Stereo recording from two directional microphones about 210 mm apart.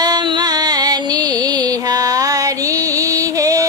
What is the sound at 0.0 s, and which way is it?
Music, 20° right (ahead or behind).